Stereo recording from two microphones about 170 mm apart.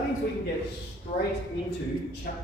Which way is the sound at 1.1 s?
60° left (ahead or behind).